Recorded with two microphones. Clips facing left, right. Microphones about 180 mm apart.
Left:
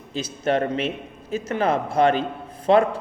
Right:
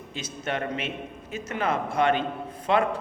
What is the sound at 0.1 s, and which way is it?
A man's voice, 35° left (ahead or behind).